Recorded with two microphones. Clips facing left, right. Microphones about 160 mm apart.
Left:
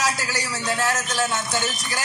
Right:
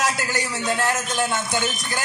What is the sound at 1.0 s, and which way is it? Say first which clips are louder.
Speech: right 1 dB; 15° right (ahead or behind).